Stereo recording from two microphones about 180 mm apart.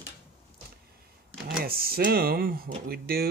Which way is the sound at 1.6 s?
55° right (ahead or behind).